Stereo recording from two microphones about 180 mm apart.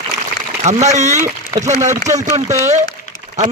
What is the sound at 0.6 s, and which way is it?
Speech, 40° right (ahead or behind).